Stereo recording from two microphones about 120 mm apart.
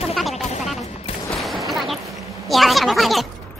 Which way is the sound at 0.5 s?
65° left (ahead or behind).